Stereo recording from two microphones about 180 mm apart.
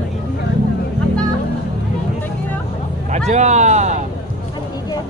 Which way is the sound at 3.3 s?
40° right (ahead or behind).